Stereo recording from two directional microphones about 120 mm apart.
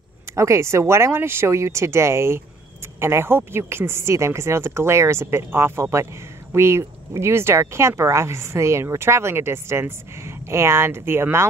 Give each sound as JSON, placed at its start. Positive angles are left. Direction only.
{"t": 0.4, "sound": "speech", "side_deg": -25}